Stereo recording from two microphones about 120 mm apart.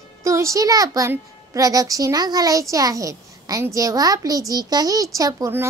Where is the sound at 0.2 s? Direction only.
25° right (ahead or behind).